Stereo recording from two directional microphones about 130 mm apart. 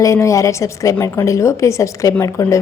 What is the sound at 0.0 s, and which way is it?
A woman's voice, 25° left (ahead or behind).